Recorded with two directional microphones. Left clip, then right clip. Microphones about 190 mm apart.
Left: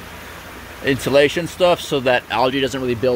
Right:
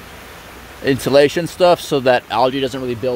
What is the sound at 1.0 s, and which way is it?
Speech, 45° right (ahead or behind).